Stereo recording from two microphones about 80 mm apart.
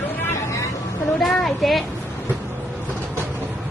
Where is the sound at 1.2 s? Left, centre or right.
Centre.